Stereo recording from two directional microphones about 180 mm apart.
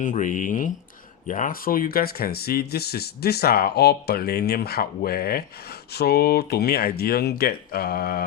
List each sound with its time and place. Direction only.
0.0 s speech: 45° left (ahead or behind)